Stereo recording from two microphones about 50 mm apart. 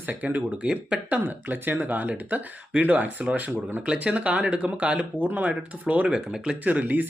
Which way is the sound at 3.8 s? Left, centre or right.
Right.